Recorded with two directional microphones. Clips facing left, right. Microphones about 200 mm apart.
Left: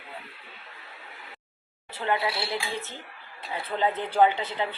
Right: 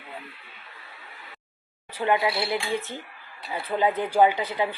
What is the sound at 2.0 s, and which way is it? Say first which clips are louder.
Speech: right 4 dB; 15° right (ahead or behind).